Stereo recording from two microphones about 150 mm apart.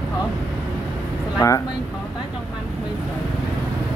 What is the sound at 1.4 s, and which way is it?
Speech, 20° left (ahead or behind).